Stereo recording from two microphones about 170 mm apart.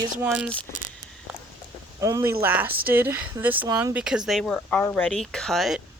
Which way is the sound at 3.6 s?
20° right (ahead or behind).